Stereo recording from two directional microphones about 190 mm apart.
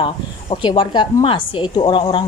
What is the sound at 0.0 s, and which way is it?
Speech, 25° left (ahead or behind).